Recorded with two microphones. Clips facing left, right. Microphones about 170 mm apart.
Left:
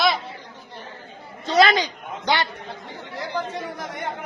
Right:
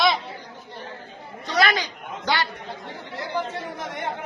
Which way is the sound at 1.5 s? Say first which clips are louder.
Left 5 dB; 25° left (ahead or behind).